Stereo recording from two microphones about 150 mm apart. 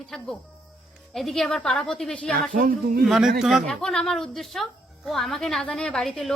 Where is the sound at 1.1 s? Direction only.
Centre (ahead or behind).